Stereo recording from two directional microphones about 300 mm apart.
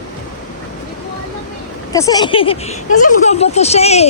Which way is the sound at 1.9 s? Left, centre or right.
Centre.